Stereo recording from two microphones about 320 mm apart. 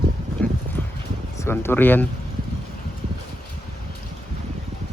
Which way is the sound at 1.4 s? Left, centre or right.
Centre.